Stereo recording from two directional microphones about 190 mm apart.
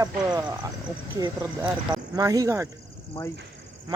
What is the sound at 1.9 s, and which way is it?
Speech, 20° right (ahead or behind).